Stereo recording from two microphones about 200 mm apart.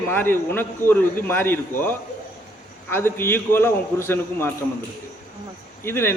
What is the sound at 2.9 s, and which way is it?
A man's voice, 10° left (ahead or behind).